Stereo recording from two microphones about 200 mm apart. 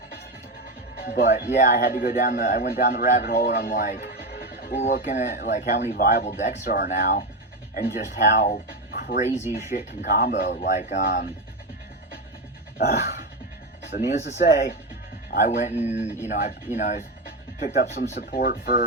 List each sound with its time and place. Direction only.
1.0 s speech: 40° left (ahead or behind)
4.0 s neigh: 50° left (ahead or behind)
4.7 s speech: 35° left (ahead or behind)
8.9 s music: 50° left (ahead or behind)
9.7 s speech: 45° left (ahead or behind)
12.8 s dog: 40° left (ahead or behind)
14.1 s speech: 35° left (ahead or behind)
14.4 s speech: 55° left (ahead or behind)
15.3 s speech: 40° left (ahead or behind)